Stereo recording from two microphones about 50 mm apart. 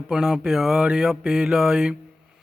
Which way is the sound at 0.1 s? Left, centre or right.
Centre.